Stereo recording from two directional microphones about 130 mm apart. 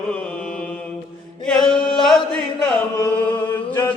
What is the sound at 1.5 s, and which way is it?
Singing, 5° left (ahead or behind).